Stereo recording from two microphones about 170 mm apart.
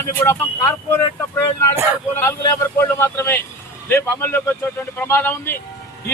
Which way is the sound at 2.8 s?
15° left (ahead or behind).